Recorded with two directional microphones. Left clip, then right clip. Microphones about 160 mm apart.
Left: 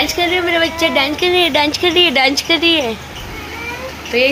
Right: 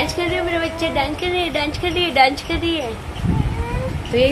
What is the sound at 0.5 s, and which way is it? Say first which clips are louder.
Speech: left 7 dB; 35° left (ahead or behind).